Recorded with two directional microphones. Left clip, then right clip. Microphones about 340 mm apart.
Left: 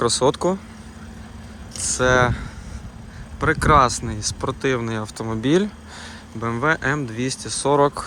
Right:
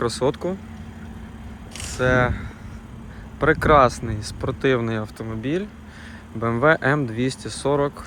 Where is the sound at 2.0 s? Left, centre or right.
Centre.